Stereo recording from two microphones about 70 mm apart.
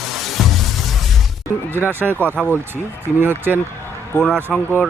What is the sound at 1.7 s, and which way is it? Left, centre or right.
Speech, right.